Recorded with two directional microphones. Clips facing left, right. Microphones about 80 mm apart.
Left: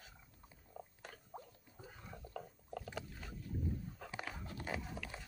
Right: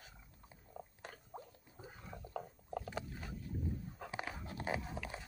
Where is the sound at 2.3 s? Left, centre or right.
Right.